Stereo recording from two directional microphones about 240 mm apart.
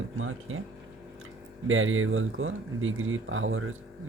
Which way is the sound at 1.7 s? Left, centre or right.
Right.